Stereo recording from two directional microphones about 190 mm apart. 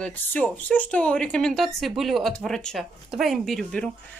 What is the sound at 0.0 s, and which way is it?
A woman's voice, 10° left (ahead or behind).